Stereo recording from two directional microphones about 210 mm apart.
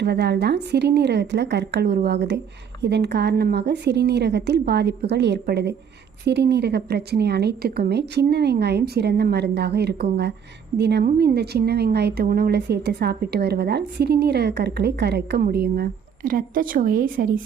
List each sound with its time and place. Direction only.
0.0 s speech: 50° right (ahead or behind)